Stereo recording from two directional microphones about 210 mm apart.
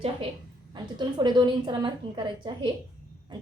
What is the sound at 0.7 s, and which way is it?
A woman's voice, 20° right (ahead or behind).